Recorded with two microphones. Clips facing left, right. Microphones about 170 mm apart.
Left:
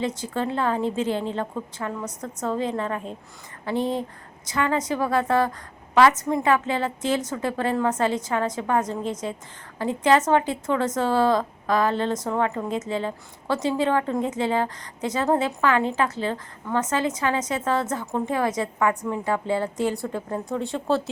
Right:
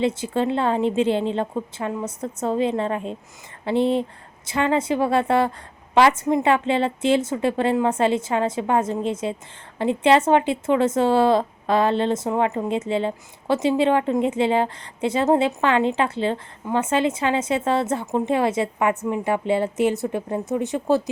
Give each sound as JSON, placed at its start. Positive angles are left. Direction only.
{"t": 0.3, "sound": "a woman's voice", "side_deg": -20}
{"t": 4.5, "sound": "a woman's voice", "side_deg": -25}